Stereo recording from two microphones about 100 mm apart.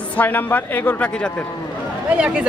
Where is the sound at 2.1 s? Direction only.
10° right (ahead or behind).